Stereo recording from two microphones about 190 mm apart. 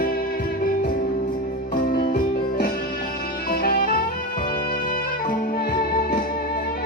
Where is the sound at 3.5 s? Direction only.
50° left (ahead or behind).